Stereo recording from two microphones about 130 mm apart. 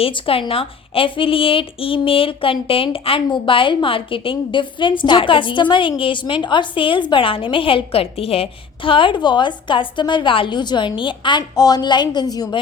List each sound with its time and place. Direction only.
0.0 s a woman's voice: 45° left (ahead or behind); by 12.5 s 30° left (ahead or behind)